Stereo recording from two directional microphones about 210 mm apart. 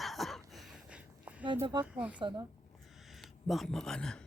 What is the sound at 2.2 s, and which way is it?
Speech, 20° right (ahead or behind).